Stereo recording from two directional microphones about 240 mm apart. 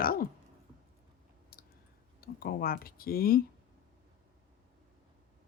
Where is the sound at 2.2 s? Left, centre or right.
Left.